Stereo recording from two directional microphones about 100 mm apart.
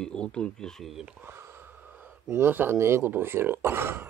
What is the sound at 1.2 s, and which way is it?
Speech, 25° right (ahead or behind).